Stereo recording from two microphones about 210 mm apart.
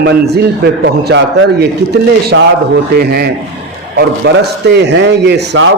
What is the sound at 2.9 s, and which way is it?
A man's voice, 50° right (ahead or behind).